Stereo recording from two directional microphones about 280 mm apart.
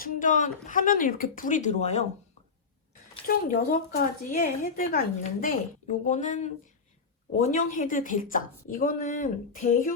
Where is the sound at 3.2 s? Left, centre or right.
Left.